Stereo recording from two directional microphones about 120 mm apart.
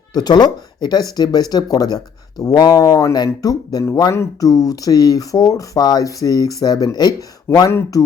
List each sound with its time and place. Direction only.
0.1 s speech: 35° left (ahead or behind)
7.7 s speech: 20° left (ahead or behind)